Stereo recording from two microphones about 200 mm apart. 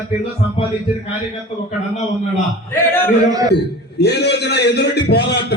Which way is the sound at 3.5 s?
55° left (ahead or behind).